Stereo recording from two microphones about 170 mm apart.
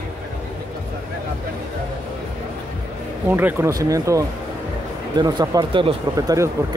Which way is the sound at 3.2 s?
10° right (ahead or behind).